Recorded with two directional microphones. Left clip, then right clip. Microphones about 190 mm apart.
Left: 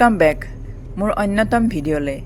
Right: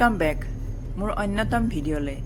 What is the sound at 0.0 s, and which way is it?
A woman's voice, 35° left (ahead or behind).